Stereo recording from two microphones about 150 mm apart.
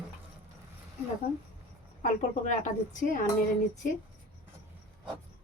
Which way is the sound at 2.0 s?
55° left (ahead or behind).